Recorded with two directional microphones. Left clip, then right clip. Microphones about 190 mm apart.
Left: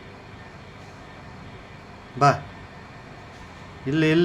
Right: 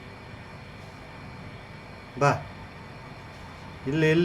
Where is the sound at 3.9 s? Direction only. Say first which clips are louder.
Left 2 dB; 15° left (ahead or behind).